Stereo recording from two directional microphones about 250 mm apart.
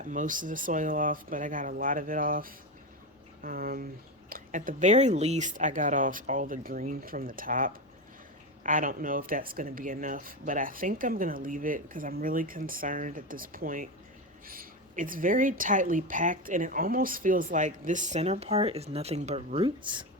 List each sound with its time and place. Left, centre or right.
0.0 s a woman's voice: right